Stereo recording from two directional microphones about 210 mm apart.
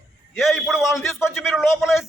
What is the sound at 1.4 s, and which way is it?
Speech, centre (ahead or behind).